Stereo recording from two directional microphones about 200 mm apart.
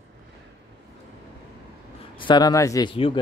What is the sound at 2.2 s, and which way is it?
Speech, 20° left (ahead or behind).